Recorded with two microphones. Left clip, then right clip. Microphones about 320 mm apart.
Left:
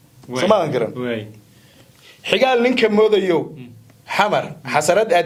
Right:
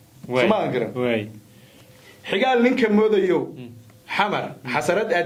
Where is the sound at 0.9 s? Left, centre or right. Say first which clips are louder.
Right 2 dB; centre.